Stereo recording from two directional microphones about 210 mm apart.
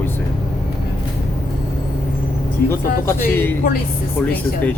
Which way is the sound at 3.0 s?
10° left (ahead or behind).